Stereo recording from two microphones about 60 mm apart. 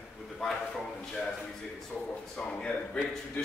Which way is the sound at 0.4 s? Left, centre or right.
Centre.